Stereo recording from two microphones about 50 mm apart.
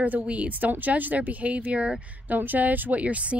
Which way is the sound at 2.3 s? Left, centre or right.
Right.